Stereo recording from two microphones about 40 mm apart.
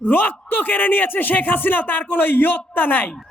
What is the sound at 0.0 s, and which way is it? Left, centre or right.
Speech, left.